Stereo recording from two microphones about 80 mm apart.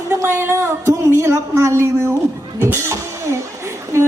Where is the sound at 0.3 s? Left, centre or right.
Right.